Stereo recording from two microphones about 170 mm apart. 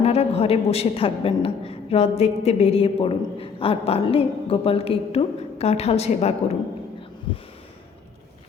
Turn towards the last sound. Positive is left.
turn(degrees=35)  # may be behind; listen again after turning